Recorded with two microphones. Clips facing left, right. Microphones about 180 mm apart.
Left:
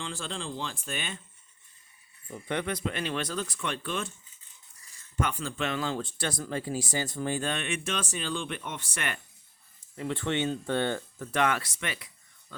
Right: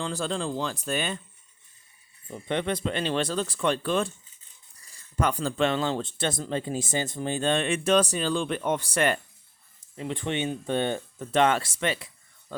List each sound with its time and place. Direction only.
0.0 s speech: 40° right (ahead or behind)
2.2 s speech: 25° right (ahead or behind)
9.9 s speech: 20° right (ahead or behind)